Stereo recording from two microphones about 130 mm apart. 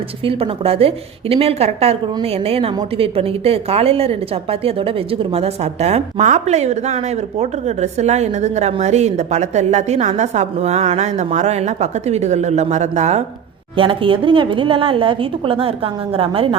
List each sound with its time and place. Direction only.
0.3 s a woman's voice: 45° right (ahead or behind)
13.7 s a woman's voice: 40° right (ahead or behind)